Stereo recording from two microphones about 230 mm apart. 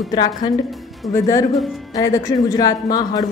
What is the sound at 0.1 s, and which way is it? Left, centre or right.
A woman's voice, centre.